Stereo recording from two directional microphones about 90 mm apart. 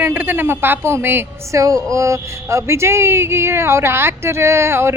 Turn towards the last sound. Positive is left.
turn(degrees=-30)  # may be behind; listen again after turning